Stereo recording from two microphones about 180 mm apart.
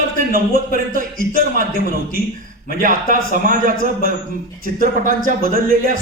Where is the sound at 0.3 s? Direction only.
55° right (ahead or behind).